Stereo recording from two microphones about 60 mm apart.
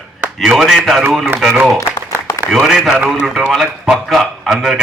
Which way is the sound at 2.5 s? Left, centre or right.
Centre.